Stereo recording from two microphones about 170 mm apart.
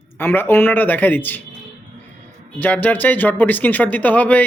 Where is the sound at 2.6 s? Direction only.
10° left (ahead or behind).